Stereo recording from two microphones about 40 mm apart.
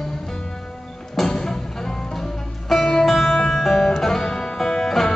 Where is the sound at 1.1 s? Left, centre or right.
Centre.